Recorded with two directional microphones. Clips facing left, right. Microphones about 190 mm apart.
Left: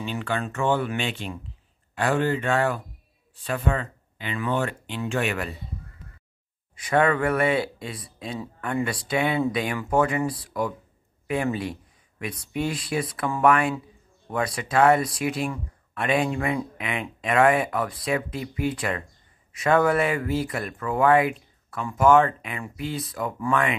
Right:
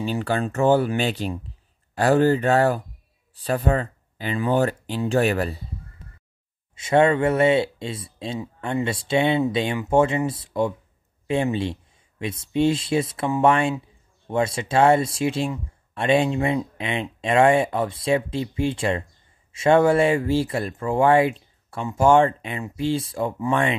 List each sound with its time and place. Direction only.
0.0 s speech: 35° right (ahead or behind)
6.7 s speech: 25° right (ahead or behind)